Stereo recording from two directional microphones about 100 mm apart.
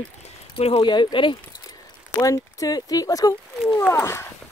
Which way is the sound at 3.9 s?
25° left (ahead or behind).